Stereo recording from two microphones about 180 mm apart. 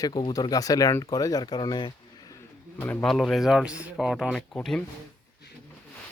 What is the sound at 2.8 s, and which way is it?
Speech, 5° left (ahead or behind).